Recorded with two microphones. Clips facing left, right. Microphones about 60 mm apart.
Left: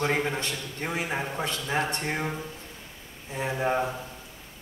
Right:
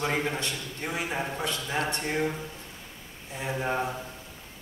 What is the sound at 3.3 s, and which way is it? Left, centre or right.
Speech, left.